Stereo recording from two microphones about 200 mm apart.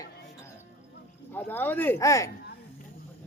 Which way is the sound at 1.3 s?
10° left (ahead or behind).